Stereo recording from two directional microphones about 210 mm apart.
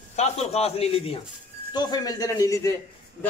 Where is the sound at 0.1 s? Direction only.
30° left (ahead or behind).